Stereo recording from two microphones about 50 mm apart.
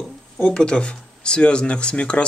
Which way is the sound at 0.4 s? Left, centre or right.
Centre.